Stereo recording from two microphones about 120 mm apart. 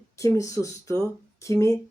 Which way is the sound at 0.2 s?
25° left (ahead or behind).